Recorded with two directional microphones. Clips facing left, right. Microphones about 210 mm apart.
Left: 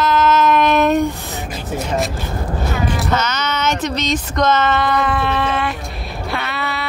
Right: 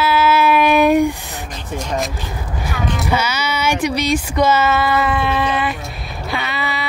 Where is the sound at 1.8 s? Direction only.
5° left (ahead or behind).